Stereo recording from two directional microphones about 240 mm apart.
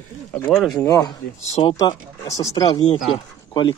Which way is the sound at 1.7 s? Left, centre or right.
Centre.